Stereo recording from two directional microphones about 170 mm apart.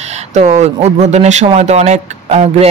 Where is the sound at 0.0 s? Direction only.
40° right (ahead or behind).